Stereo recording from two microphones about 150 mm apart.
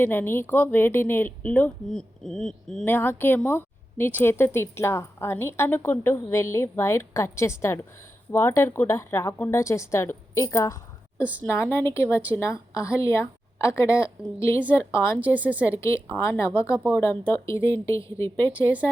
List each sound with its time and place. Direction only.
0.0 s a woman's voice: 15° left (ahead or behind)
2.8 s a woman's voice: 15° left (ahead or behind)
15.2 s a woman's voice: 10° right (ahead or behind)
15.6 s a woman's voice: 20° left (ahead or behind)